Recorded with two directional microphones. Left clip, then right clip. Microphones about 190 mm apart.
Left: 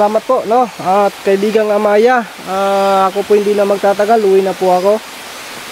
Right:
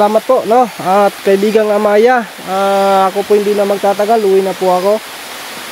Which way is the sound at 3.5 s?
15° left (ahead or behind).